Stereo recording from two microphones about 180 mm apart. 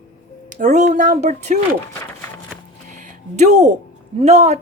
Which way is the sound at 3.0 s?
40° right (ahead or behind).